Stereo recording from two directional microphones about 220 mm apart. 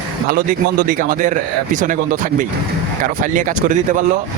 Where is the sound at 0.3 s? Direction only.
40° right (ahead or behind).